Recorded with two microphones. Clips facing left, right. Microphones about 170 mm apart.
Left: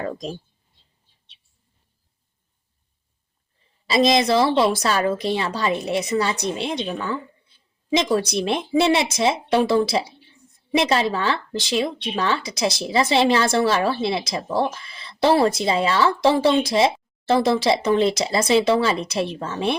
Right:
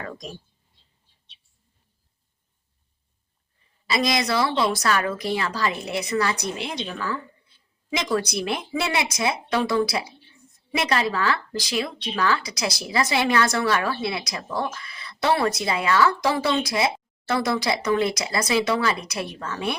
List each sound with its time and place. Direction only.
0.0 s speech: 30° left (ahead or behind)
3.8 s speech: 25° left (ahead or behind)